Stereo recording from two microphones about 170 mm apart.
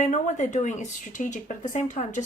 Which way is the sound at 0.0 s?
45° left (ahead or behind).